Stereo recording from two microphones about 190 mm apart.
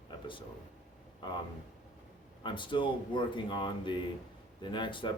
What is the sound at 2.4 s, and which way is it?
Speech, 25° left (ahead or behind).